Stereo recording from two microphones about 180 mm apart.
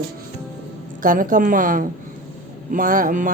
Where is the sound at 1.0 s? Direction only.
50° right (ahead or behind).